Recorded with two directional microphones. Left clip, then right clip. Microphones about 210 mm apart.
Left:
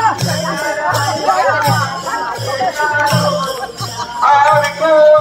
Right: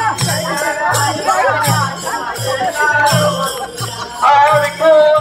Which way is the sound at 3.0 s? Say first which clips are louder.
Right 1 dB; 40° right (ahead or behind).